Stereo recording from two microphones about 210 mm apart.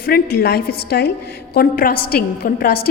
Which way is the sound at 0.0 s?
45° left (ahead or behind).